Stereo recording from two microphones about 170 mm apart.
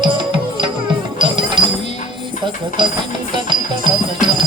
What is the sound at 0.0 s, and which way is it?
Music, 30° right (ahead or behind).